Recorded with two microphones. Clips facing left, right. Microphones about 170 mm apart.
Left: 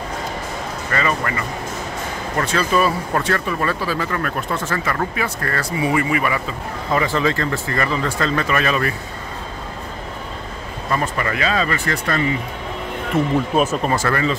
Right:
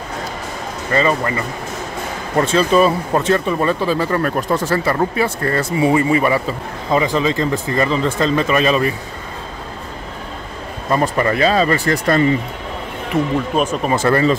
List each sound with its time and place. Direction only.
0.9 s speech: 25° right (ahead or behind)
6.9 s speech: 20° right (ahead or behind)
10.9 s speech: 35° right (ahead or behind)
13.1 s speech: 5° left (ahead or behind)
13.8 s speech: 25° right (ahead or behind)